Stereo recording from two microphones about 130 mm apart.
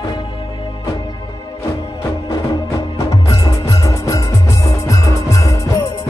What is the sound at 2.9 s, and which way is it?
Music, 25° left (ahead or behind).